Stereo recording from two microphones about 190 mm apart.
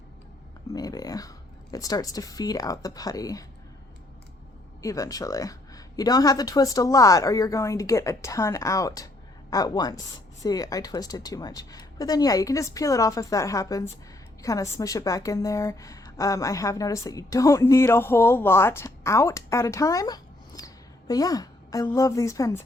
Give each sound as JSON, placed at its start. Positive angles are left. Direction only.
{"t": 0.7, "sound": "a sound", "side_deg": 20}
{"t": 1.7, "sound": "a woman's voice", "side_deg": 20}
{"t": 4.8, "sound": "a woman's voice", "side_deg": 15}